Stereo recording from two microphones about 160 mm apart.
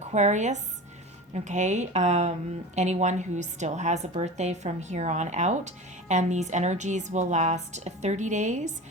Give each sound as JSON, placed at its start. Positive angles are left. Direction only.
{"t": 0.1, "sound": "a woman's voice", "side_deg": -45}